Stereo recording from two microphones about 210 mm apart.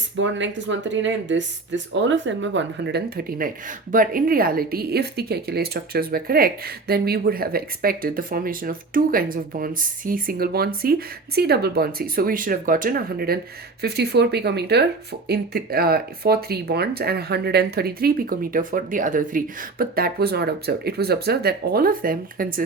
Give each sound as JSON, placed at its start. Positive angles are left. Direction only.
{"t": 0.2, "sound": "speech", "side_deg": -60}